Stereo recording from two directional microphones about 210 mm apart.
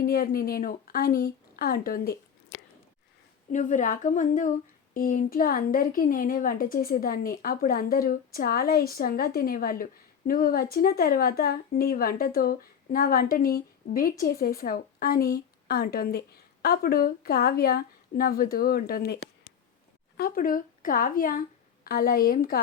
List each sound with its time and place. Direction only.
0.0 s a woman's voice: 45° left (ahead or behind)